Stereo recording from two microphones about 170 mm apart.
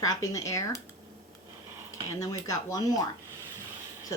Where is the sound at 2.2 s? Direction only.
20° left (ahead or behind).